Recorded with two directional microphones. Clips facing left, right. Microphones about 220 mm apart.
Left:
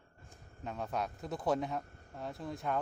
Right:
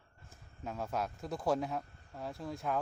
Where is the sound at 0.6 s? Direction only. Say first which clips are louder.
Even; centre (ahead or behind).